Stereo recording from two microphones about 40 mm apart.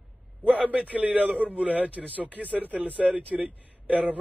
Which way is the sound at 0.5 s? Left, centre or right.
Right.